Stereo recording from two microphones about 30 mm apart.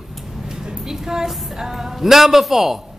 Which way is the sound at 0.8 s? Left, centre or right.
Centre.